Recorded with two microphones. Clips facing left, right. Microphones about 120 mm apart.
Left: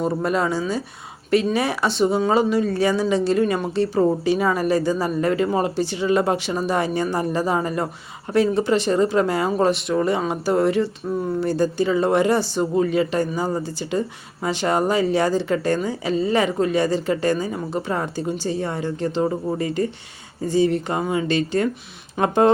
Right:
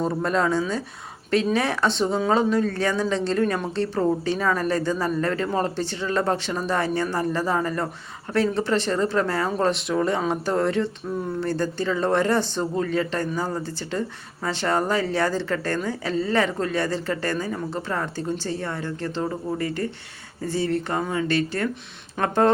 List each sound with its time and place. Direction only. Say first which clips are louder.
0.0 s speech: left 1 dB; 10° left (ahead or behind)